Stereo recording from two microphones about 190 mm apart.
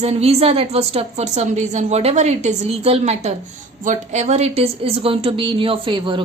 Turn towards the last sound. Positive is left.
turn(degrees=-25)  # may be behind; listen again after turning